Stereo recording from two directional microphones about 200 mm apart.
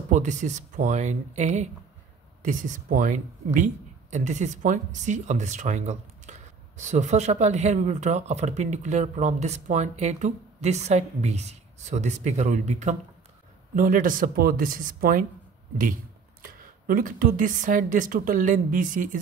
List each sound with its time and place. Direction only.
0.1 s speech: 35° right (ahead or behind)
16.8 s speech: 45° right (ahead or behind)